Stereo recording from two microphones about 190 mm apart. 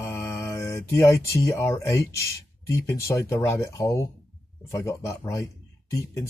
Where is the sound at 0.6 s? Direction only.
15° left (ahead or behind).